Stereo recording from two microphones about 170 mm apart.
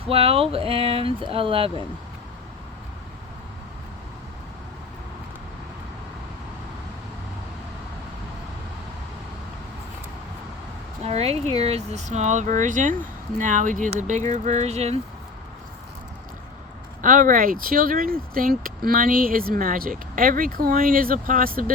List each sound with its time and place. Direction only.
0.1 s speech: 35° right (ahead or behind)
11.0 s speech: 35° right (ahead or behind)
17.0 s speech: 50° right (ahead or behind)